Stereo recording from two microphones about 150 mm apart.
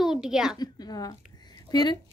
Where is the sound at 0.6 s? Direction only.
25° left (ahead or behind).